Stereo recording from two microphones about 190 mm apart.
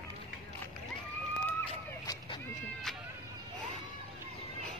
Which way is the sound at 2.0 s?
25° left (ahead or behind).